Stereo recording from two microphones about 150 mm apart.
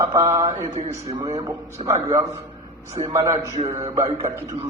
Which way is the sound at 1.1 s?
35° right (ahead or behind).